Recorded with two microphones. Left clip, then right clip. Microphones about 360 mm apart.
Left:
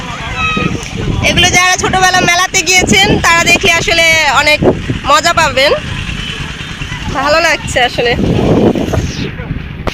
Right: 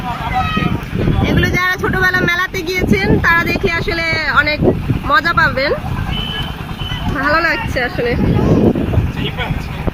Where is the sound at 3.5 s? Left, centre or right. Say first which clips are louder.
Left 9 dB; left.